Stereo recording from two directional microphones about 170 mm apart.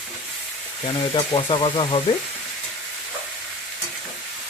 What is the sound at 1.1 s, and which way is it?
Speech, 30° left (ahead or behind).